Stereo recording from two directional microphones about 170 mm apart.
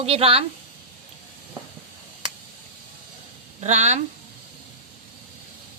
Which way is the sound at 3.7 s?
40° right (ahead or behind).